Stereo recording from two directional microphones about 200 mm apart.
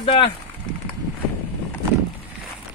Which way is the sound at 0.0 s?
25° left (ahead or behind).